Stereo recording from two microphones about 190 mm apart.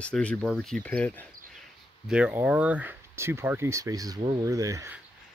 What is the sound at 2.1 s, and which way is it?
Speech, 10° right (ahead or behind).